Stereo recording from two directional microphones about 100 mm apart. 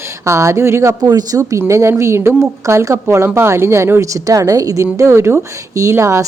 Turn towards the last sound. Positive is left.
turn(degrees=-25)  # may be behind; listen again after turning